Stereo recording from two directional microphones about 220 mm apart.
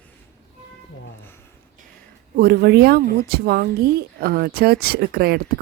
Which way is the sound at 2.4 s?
45° right (ahead or behind).